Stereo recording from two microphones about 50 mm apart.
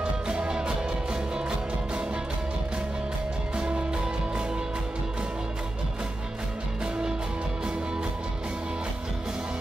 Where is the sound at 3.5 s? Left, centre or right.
Centre.